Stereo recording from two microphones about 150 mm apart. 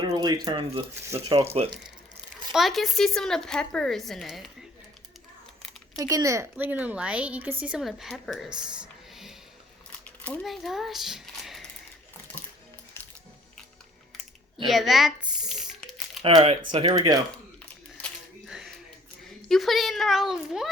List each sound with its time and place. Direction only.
0.0 s a sound: 25° right (ahead or behind)
0.4 s speech: 30° right (ahead or behind)
2.5 s a woman's voice: centre (ahead or behind)
6.0 s a woman's voice: 25° right (ahead or behind); by 9.3 s 5° right (ahead or behind)
10.2 s a sound: 10° left (ahead or behind)
10.4 s speech: centre (ahead or behind)
14.7 s crumpling: centre (ahead or behind)
16.2 s speech: 40° right (ahead or behind)
16.8 s speech: 25° right (ahead or behind)
17.6 s a sound: 5° left (ahead or behind)
19.4 s a woman's voice: centre (ahead or behind)